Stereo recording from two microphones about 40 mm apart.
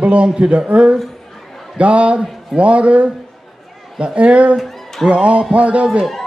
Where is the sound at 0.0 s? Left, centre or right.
Right.